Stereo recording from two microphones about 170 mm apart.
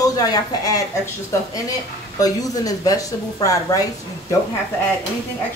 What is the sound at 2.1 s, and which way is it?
Speech, 20° left (ahead or behind).